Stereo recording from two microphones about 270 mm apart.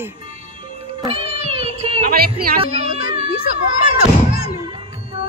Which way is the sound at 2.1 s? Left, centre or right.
Right.